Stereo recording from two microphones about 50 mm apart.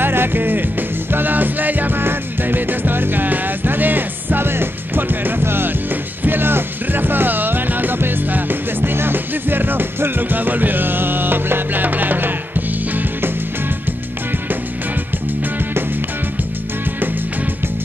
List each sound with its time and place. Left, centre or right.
0.0 s music: right